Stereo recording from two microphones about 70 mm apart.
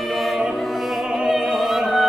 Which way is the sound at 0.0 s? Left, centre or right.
Centre.